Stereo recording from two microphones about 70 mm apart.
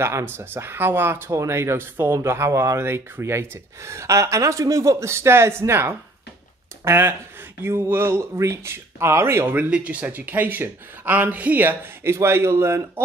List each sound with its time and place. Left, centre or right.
0.0 s speech: right
8.2 s speech: right
9.7 s speech: centre; by 13.0 s right